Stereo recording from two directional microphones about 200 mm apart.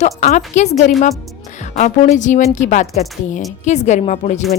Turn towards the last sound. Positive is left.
turn(degrees=35)  # may be behind; listen again after turning